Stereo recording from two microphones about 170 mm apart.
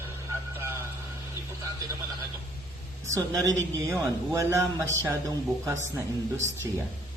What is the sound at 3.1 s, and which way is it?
A man's voice, 20° right (ahead or behind).